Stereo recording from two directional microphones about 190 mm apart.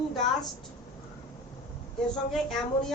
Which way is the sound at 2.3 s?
Centre (ahead or behind).